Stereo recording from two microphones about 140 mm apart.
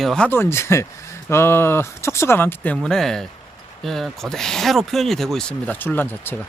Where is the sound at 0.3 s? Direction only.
15° left (ahead or behind).